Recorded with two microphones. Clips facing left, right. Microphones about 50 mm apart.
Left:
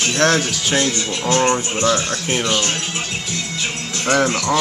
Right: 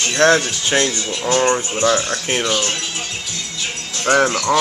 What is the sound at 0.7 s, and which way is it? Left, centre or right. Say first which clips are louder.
Speech: right 1 dB; centre.